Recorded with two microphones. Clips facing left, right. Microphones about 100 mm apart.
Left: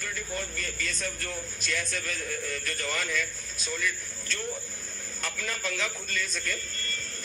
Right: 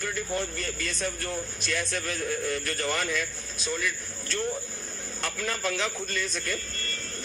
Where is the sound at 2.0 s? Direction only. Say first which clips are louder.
Right 5 dB; 30° right (ahead or behind).